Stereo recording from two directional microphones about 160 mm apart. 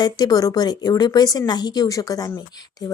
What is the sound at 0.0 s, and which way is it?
A woman's voice, 25° left (ahead or behind).